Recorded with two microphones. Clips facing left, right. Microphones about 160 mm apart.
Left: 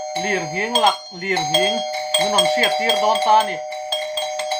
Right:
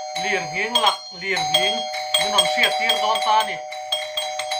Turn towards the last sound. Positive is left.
turn(degrees=35)  # may be behind; listen again after turning